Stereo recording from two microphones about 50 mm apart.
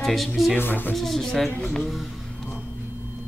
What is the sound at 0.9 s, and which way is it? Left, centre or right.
Speech, centre.